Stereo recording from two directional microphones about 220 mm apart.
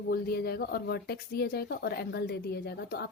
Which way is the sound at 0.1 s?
45° left (ahead or behind).